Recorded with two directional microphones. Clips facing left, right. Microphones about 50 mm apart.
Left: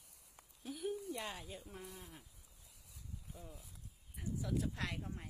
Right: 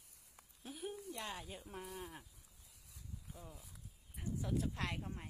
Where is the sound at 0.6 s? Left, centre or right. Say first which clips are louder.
Left 5 dB; centre.